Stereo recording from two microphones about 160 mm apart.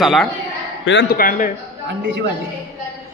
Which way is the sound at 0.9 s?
65° left (ahead or behind).